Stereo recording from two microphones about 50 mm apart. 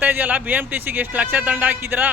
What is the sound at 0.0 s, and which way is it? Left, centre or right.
A man's voice, right.